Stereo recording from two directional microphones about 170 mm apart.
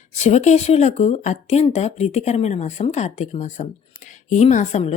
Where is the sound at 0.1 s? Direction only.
40° left (ahead or behind).